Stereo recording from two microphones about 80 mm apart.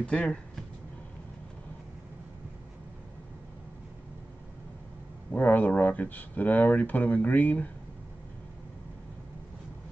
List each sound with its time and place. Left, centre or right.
0.0 s speech: centre
5.3 s speech: left